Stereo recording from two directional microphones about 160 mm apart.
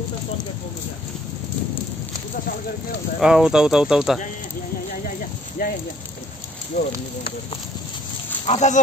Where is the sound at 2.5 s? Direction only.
70° left (ahead or behind).